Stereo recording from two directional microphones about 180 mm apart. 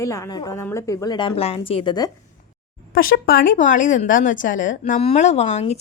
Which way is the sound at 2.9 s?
55° left (ahead or behind).